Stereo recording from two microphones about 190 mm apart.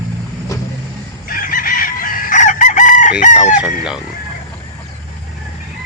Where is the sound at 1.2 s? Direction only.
45° left (ahead or behind).